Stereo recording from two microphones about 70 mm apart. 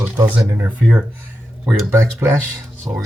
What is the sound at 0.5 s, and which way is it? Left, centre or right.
Speech, right.